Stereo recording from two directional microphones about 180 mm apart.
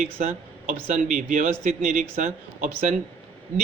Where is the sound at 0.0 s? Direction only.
40° right (ahead or behind).